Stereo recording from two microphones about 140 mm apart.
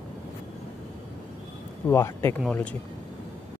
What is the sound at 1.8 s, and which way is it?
Speech, 20° left (ahead or behind).